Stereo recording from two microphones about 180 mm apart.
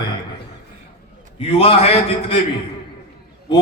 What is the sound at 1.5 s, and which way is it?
Speech, 35° left (ahead or behind).